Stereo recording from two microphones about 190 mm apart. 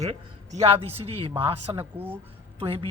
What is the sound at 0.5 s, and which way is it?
A man's voice, 30° right (ahead or behind).